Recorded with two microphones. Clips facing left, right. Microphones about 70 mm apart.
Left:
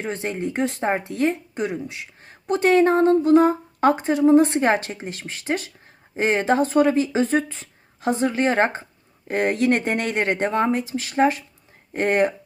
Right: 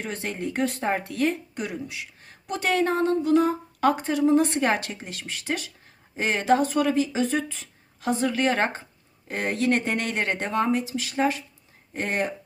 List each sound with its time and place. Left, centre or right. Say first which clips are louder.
0.0 s speech: left 4 dB; left